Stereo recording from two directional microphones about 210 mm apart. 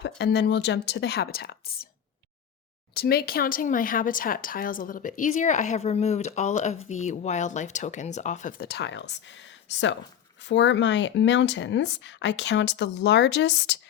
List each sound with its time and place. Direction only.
0.2 s speech: 55° left (ahead or behind)
2.9 s speech: 50° left (ahead or behind)